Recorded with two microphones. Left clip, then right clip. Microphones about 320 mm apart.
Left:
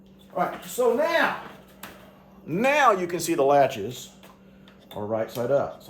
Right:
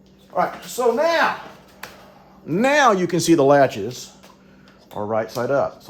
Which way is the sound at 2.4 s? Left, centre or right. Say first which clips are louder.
Right 4 dB; right.